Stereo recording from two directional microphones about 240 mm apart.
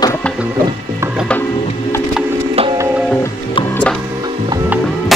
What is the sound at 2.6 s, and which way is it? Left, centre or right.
Music, centre.